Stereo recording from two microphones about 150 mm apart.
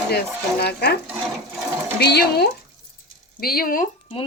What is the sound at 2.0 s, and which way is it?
Speech, 90° left.